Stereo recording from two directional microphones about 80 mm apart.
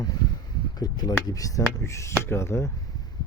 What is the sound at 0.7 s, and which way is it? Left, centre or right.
Speech, left.